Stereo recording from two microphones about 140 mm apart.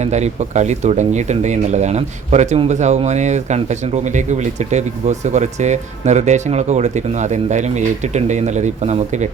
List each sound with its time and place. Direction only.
0.0 s speech: 55° right (ahead or behind)